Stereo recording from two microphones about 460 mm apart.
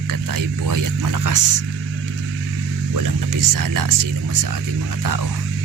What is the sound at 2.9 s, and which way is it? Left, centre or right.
Speech, right.